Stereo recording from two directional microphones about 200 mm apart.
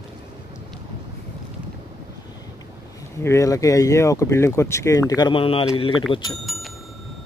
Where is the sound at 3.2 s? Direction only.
15° left (ahead or behind).